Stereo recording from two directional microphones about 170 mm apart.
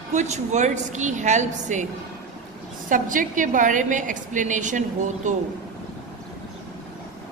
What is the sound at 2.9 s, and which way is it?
A woman's voice, 50° right (ahead or behind).